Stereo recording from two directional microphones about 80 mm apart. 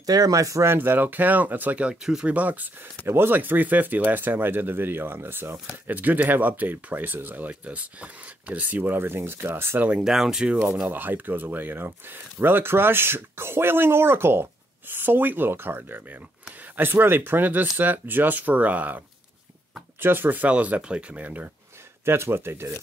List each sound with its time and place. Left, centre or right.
0.0 s speech: right
0.7 s speech: right
9.8 s speech: centre
10.9 s speech: right
22.0 s speech: right